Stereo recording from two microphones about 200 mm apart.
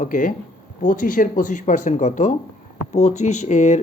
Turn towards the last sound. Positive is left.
turn(degrees=35)  # may be behind; listen again after turning